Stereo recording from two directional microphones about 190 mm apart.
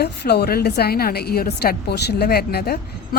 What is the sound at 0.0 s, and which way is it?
A woman's voice, 60° left (ahead or behind).